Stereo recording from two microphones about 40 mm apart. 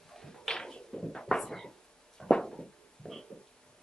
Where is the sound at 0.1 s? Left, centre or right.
Centre.